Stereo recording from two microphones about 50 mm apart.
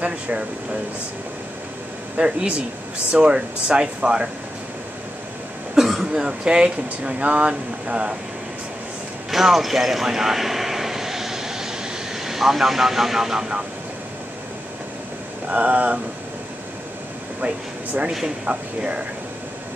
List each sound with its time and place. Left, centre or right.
0.0 s speech: right
2.1 s speech: right
5.8 s speech: centre
9.3 s vehicle: centre
15.4 s speech: right
17.4 s speech: right